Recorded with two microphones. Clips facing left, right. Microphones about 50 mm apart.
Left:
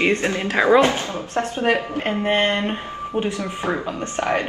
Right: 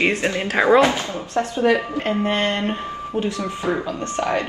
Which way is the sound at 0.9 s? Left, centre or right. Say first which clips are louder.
Right 1 dB; left.